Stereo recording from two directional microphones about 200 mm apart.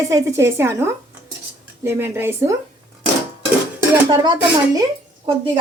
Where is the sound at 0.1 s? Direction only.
15° right (ahead or behind).